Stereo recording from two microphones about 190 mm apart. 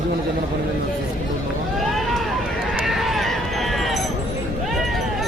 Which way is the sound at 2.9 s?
Centre (ahead or behind).